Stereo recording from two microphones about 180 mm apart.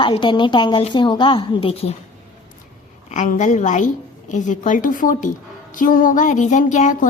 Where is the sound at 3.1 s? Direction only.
40° left (ahead or behind).